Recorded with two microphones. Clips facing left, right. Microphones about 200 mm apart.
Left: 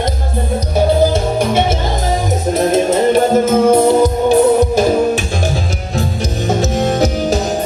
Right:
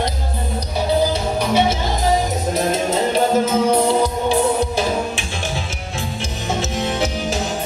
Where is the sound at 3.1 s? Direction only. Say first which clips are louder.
Left 4 dB; 50° left (ahead or behind).